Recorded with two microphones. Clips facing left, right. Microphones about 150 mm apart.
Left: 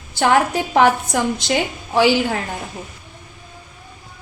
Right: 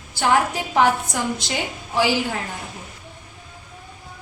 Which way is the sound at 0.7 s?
65° left (ahead or behind).